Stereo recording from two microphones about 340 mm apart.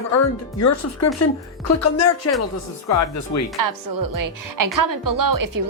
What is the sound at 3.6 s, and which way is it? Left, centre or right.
A woman's voice, right.